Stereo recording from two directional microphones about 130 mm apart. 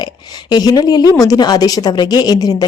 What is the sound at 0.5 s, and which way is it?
A woman's voice, 30° left (ahead or behind).